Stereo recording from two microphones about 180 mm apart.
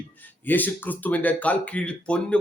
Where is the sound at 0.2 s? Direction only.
10° left (ahead or behind).